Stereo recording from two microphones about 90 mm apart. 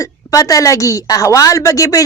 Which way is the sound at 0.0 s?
40° left (ahead or behind).